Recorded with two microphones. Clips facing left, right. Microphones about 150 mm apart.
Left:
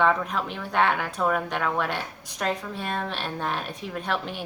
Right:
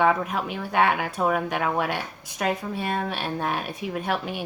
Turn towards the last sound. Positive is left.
turn(degrees=-5)  # may be behind; listen again after turning